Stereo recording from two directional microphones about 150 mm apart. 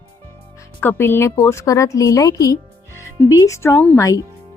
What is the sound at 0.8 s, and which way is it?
A woman's voice, 15° left (ahead or behind).